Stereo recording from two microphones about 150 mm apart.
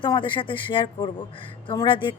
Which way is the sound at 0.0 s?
35° left (ahead or behind).